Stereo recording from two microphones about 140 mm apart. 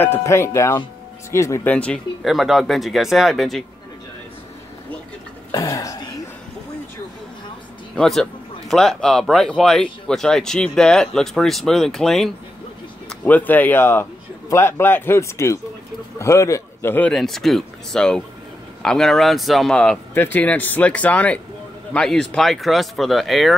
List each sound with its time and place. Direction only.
0.0 s speech: 20° left (ahead or behind)
2.2 s speech: centre (ahead or behind)
5.5 s speech: 25° left (ahead or behind)
7.9 s a man's voice: 5° left (ahead or behind)
17.1 s speech: centre (ahead or behind)